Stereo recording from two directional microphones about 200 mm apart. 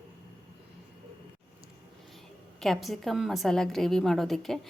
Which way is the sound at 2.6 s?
Centre (ahead or behind).